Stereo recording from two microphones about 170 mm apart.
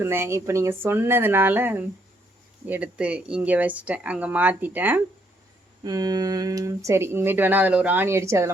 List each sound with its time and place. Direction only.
0.0 s speech: 15° right (ahead or behind)
5.8 s speech: 20° right (ahead or behind)